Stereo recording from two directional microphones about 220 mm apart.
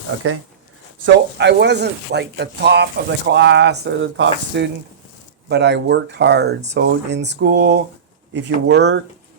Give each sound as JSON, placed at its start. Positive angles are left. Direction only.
{"t": 0.1, "sound": "speech", "side_deg": -60}